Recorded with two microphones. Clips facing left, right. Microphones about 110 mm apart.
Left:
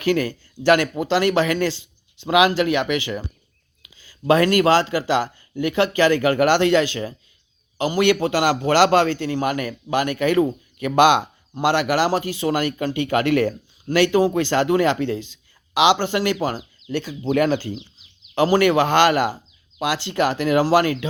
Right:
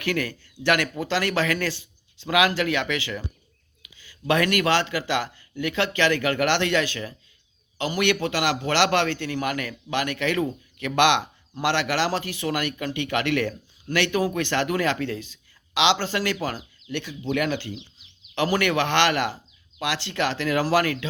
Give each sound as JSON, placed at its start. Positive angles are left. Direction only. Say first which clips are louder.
{"t": 0.0, "sound": "a man's voice", "louder": "left 6 dB", "side_deg": 25}
{"t": 17.0, "sound": "a man's voice", "louder": "left 6 dB", "side_deg": 40}